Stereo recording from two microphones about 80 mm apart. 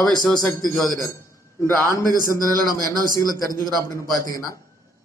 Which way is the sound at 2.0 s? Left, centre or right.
Right.